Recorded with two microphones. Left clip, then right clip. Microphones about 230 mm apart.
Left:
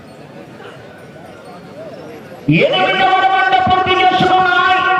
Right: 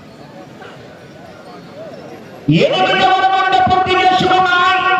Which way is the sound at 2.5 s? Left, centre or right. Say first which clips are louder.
Even; right.